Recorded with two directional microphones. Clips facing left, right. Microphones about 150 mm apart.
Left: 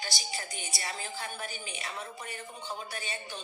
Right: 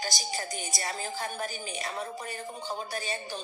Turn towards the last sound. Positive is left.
turn(degrees=-40)  # may be behind; listen again after turning